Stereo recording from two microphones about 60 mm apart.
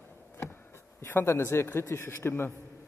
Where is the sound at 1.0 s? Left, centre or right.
Left.